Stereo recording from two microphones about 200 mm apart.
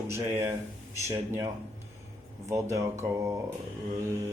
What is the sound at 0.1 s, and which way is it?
Speech, 15° right (ahead or behind).